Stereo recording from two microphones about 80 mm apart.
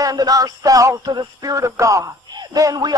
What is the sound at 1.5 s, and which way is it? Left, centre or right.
Speech, right.